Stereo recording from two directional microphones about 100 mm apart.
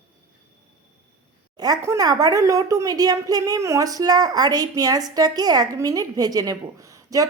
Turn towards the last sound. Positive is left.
turn(degrees=-35)  # may be behind; listen again after turning